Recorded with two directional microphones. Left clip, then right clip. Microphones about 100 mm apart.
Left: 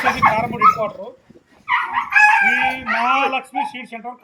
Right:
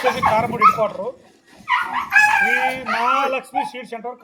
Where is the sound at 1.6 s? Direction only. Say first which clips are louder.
Left 1 dB; 35° right (ahead or behind).